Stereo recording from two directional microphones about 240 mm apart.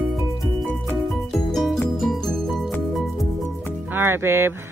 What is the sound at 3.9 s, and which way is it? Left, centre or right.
Speech, centre.